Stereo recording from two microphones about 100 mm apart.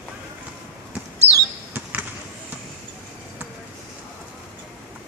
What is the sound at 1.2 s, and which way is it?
Basketball bounce, 90° right.